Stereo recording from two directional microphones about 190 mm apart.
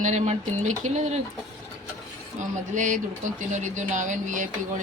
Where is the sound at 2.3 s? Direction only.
40° right (ahead or behind).